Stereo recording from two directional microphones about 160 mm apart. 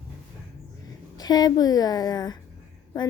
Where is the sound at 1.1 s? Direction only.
25° left (ahead or behind).